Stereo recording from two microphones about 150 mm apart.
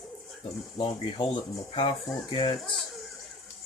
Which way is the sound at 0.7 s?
40° left (ahead or behind).